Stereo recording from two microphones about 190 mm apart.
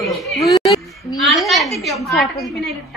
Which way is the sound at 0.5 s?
20° left (ahead or behind).